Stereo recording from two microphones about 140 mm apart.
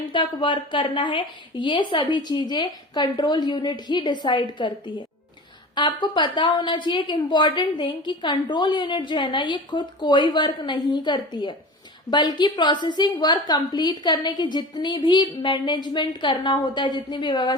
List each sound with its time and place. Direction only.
0.1 s a woman's voice: 35° left (ahead or behind)